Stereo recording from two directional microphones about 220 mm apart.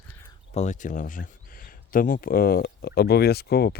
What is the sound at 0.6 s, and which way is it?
Speech, 35° left (ahead or behind).